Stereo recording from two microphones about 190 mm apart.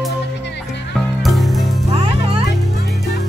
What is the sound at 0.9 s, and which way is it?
Music, centre (ahead or behind).